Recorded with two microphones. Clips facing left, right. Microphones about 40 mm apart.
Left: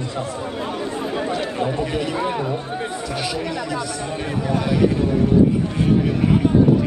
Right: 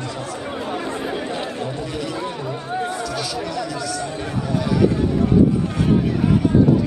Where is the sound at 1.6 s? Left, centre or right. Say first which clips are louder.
Left 4 dB; left.